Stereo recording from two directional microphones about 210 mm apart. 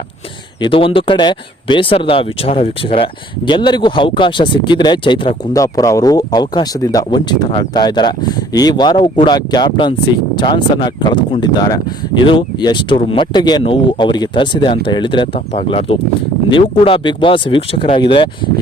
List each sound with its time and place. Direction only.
0.6 s speech: 25° left (ahead or behind)